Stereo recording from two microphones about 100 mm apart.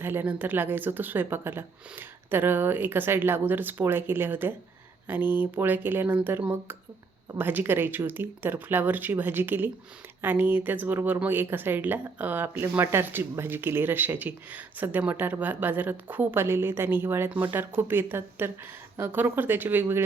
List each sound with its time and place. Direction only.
0.0 s speech: 20° right (ahead or behind)